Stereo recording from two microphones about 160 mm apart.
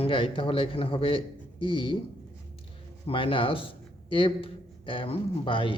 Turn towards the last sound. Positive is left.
turn(degrees=30)  # may be behind; listen again after turning